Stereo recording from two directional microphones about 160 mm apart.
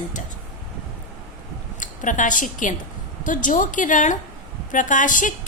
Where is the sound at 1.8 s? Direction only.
55° left (ahead or behind).